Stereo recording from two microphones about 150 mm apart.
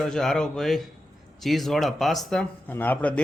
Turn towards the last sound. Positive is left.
turn(degrees=10)  # may be behind; listen again after turning